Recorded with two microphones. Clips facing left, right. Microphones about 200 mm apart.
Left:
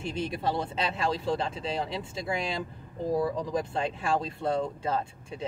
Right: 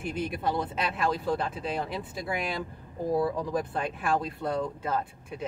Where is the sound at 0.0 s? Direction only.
25° left (ahead or behind).